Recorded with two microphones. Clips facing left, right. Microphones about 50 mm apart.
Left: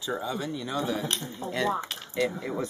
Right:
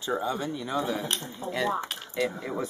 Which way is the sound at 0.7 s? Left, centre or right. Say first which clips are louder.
Right 1 dB; centre.